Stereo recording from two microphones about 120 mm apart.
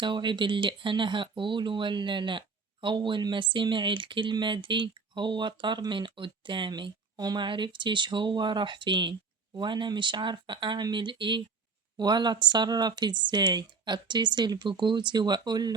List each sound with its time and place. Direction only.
0.0 s speech: 40° right (ahead or behind)